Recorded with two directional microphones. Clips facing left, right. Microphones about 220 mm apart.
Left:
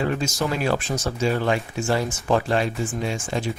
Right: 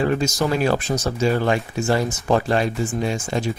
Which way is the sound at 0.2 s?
40° right (ahead or behind).